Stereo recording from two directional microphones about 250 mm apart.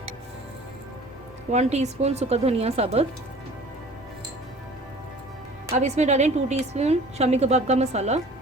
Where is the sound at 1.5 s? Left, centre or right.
Right.